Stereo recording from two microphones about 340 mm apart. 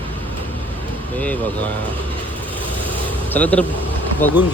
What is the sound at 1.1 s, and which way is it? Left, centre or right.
Speech, centre.